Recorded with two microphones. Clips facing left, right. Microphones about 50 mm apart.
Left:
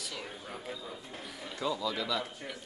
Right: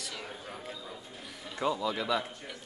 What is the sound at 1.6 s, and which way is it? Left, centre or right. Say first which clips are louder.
Speech: right 3 dB; right.